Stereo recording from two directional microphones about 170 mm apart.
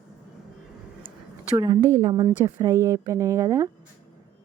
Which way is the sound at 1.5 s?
25° right (ahead or behind).